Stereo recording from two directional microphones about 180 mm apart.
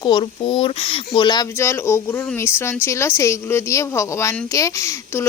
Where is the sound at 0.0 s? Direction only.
25° left (ahead or behind).